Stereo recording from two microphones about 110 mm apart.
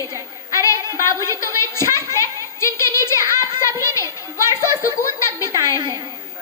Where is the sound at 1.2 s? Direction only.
25° left (ahead or behind).